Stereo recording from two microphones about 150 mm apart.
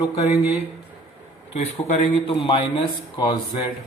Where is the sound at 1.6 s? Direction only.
50° left (ahead or behind).